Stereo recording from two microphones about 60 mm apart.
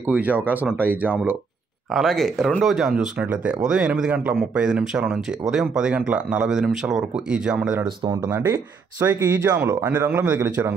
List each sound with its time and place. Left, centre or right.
0.0 s speech: right
2.0 s speech: centre
2.6 s speech: centre
3.2 s speech: right
3.6 s speech: centre
4.1 s speech: right
5.1 s speech: centre
6.5 s speech: centre
9.0 s speech: right
9.9 s a man's voice: right